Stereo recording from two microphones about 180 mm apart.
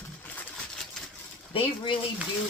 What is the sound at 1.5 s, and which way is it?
Speech, 30° left (ahead or behind).